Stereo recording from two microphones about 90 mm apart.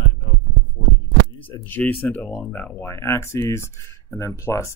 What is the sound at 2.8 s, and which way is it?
Speech, 30° left (ahead or behind).